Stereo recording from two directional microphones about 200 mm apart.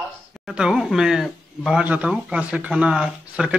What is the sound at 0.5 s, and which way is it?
Speech, 5° right (ahead or behind).